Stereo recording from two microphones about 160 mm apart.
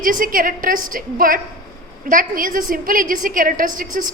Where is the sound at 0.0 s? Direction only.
60° right (ahead or behind).